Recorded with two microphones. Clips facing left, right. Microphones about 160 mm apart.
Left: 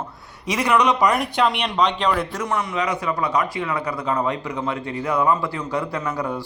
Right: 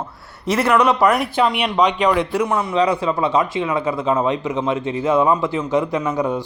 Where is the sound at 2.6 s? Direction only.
30° right (ahead or behind).